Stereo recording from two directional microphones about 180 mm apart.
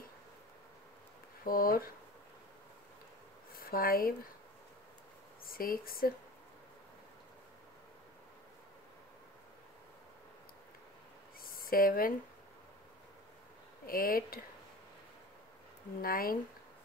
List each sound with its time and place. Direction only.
1.4 s speech: 55° left (ahead or behind)
3.5 s speech: 55° left (ahead or behind)
5.4 s speech: 55° left (ahead or behind)
11.4 s a sound: 55° left (ahead or behind)
13.8 s speech: 55° left (ahead or behind)
16.0 s speech: 55° left (ahead or behind)